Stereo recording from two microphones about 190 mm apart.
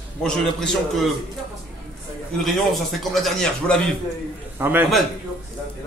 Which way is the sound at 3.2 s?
5° left (ahead or behind).